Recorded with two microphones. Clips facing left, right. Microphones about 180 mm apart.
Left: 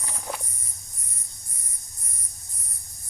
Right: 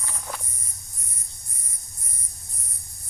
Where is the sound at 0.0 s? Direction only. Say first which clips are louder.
Left 2 dB; 20° left (ahead or behind).